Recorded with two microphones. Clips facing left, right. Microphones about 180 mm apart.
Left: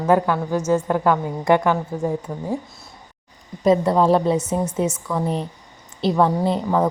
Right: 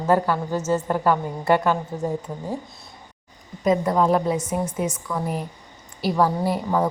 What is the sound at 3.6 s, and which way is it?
Speech, 30° left (ahead or behind).